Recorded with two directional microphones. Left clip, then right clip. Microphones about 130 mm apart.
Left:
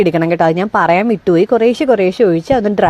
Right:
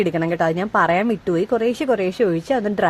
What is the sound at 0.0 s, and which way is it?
A woman's voice, 60° left (ahead or behind).